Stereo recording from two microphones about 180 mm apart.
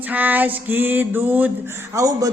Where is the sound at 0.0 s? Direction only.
10° right (ahead or behind).